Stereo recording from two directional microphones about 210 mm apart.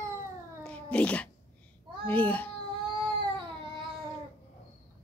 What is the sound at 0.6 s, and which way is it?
Cat, 5° left (ahead or behind).